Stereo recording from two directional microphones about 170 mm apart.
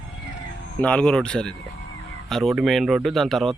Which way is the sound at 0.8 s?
5° left (ahead or behind).